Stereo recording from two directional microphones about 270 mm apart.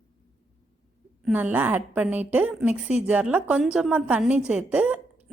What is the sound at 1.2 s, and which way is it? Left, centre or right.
A woman's voice, centre.